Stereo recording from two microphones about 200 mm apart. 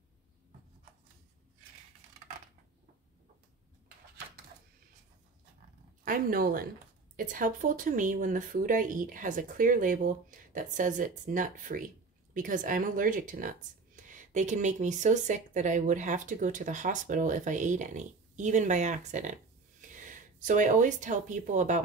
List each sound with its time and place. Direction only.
6.0 s speech: 45° right (ahead or behind)